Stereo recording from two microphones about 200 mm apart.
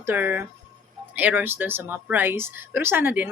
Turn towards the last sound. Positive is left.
turn(degrees=-10)  # may be behind; listen again after turning